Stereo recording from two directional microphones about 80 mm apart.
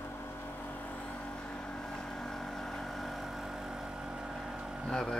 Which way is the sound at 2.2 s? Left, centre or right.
Centre.